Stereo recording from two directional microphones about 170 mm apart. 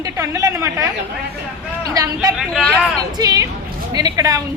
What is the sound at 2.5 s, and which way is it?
Speech, 5° left (ahead or behind).